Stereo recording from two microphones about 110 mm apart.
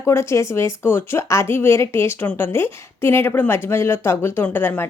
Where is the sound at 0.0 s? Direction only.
25° left (ahead or behind).